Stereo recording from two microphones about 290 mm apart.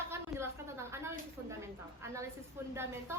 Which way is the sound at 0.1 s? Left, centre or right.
Centre.